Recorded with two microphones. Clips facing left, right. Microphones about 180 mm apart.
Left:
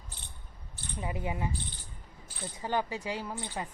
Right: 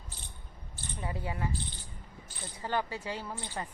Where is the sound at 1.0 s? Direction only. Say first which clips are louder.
Left 1 dB; 20° left (ahead or behind).